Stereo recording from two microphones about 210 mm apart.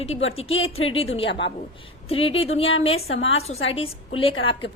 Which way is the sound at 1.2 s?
60° left (ahead or behind).